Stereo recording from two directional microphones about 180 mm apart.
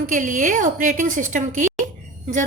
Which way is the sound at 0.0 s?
45° right (ahead or behind).